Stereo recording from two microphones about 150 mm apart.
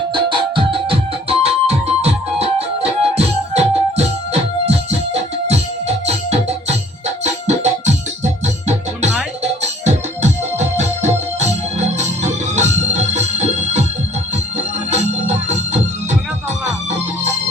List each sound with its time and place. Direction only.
0.1 s music: 30° right (ahead or behind)
6.1 s music: 45° right (ahead or behind)
9.4 s organ: 50° right (ahead or behind)
14.8 s organ: 50° right (ahead or behind)